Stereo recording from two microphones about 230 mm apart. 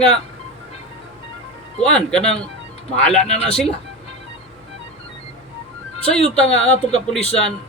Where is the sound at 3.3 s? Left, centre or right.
Left.